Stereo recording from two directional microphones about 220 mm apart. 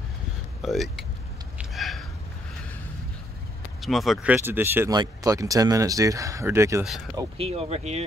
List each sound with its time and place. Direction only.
0.6 s speech: centre (ahead or behind)
1.6 s a sound: centre (ahead or behind)
3.8 s speech: centre (ahead or behind)
7.3 s speech: 25° right (ahead or behind)